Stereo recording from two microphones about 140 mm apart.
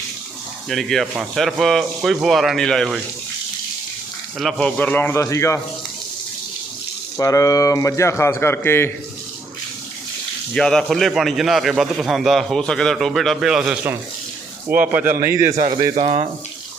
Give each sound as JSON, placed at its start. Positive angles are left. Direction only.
{"t": 0.7, "sound": "a man's voice", "side_deg": 0}
{"t": 4.4, "sound": "a man's voice", "side_deg": 0}
{"t": 4.8, "sound": "a man's voice", "side_deg": 10}
{"t": 7.2, "sound": "a man's voice", "side_deg": 25}
{"t": 10.5, "sound": "a man's voice", "side_deg": 5}
{"t": 16.0, "sound": "speech", "side_deg": -50}